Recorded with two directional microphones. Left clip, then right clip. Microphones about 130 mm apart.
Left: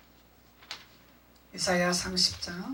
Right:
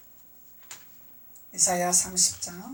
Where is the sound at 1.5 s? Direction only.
35° left (ahead or behind).